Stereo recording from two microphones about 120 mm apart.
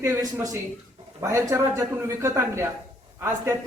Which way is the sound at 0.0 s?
25° right (ahead or behind).